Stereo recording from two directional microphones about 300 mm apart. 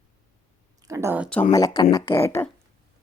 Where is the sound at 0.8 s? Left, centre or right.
Centre.